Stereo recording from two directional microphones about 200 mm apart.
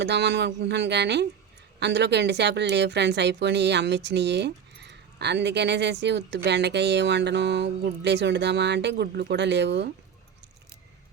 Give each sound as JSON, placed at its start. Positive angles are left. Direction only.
{"t": 0.0, "sound": "speech", "side_deg": -60}